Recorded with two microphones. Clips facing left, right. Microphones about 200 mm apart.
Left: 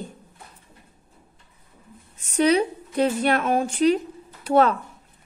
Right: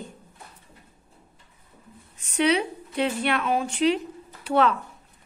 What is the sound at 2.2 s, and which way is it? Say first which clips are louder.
A woman's voice: left 3 dB; 40° left (ahead or behind).